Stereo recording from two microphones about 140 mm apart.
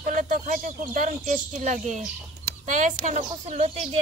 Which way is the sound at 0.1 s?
65° right (ahead or behind).